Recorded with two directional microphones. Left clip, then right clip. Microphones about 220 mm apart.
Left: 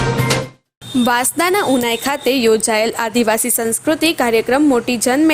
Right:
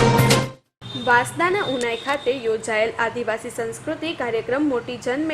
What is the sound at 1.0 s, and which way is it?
A woman's voice, 50° left (ahead or behind).